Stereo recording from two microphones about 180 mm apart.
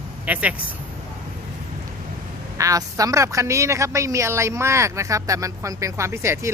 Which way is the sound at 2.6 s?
20° right (ahead or behind).